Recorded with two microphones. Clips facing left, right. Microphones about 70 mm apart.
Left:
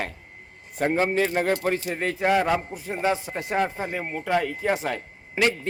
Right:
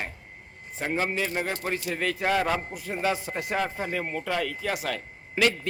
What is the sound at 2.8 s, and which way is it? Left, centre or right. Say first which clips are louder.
A man's voice: left 3 dB; left.